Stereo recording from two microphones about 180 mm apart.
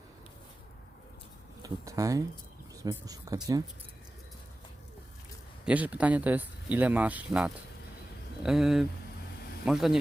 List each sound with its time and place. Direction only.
1.6 s speech: 20° right (ahead or behind)
5.6 s a man's voice: 10° right (ahead or behind)